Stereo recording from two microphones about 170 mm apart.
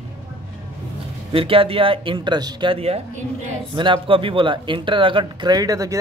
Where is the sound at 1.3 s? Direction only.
30° right (ahead or behind).